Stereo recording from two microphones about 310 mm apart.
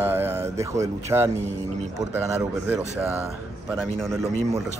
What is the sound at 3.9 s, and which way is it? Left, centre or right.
Speech, centre.